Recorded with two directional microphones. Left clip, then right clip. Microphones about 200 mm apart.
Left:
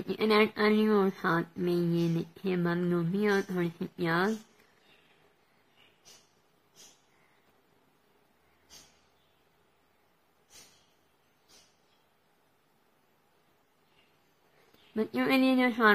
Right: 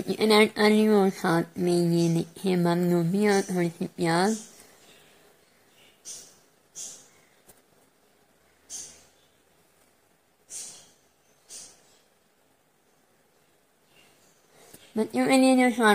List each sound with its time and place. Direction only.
0.0 s speech: 20° right (ahead or behind)
15.0 s speech: 15° right (ahead or behind)